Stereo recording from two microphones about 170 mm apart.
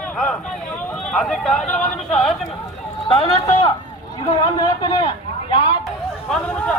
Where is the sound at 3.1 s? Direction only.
35° left (ahead or behind).